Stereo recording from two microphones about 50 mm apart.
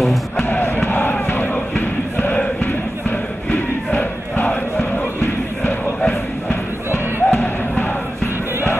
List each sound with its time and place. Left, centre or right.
0.0 s music: centre
0.5 s music: left
3.5 s crowd: left
6.9 s music: left